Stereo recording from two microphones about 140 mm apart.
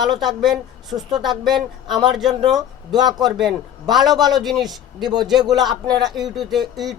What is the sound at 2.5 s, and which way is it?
Speech, 30° right (ahead or behind).